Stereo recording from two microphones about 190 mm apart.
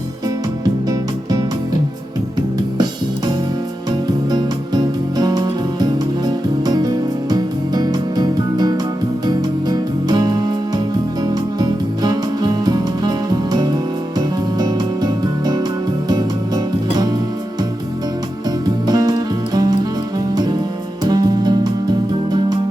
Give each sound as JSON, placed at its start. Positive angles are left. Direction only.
{"t": 0.9, "sound": "music", "side_deg": -20}
{"t": 4.3, "sound": "music", "side_deg": -20}
{"t": 18.9, "sound": "music", "side_deg": -20}